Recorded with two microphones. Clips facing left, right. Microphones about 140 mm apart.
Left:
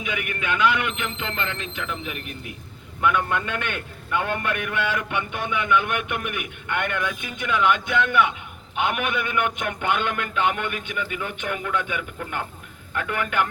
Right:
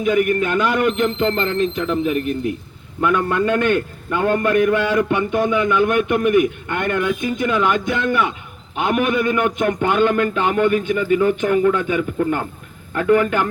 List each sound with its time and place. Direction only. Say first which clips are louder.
0.0 s a man's voice: right 13 dB; 40° right (ahead or behind)